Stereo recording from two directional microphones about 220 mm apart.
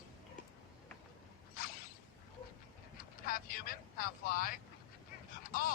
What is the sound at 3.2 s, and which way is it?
Vehicle, 40° left (ahead or behind).